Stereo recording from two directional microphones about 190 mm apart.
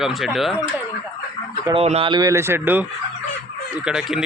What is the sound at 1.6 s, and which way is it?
Speech, 30° right (ahead or behind).